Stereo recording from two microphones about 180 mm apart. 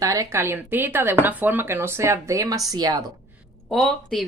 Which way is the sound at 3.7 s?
5° left (ahead or behind).